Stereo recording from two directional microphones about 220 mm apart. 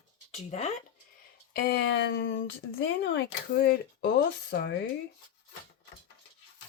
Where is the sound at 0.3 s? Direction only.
30° left (ahead or behind).